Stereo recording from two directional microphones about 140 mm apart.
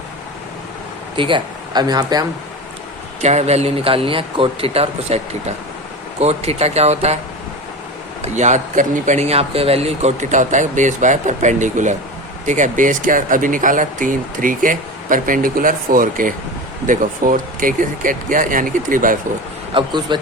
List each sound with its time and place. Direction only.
1.1 s speech: 35° right (ahead or behind)
3.2 s speech: 55° right (ahead or behind)
8.2 s speech: 60° right (ahead or behind); by 16.3 s 80° right
16.8 s speech: 70° right (ahead or behind)
19.7 s speech: 35° right (ahead or behind)